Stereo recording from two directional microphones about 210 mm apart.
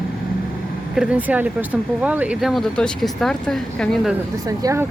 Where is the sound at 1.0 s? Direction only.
5° right (ahead or behind).